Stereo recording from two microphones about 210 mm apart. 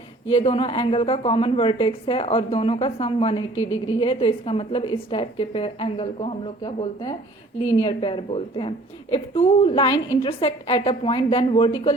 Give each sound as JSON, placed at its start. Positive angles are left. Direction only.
{"t": 0.3, "sound": "a woman's voice", "side_deg": 30}